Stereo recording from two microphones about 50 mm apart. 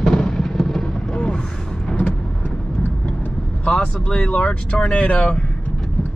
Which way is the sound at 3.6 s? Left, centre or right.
Left.